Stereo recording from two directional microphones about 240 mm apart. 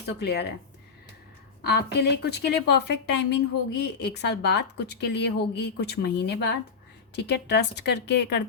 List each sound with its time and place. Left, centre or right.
0.2 s speech: left
1.6 s speech: left